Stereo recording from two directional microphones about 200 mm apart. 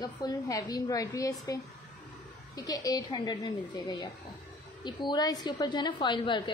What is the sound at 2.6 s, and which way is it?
A woman's voice, 20° left (ahead or behind).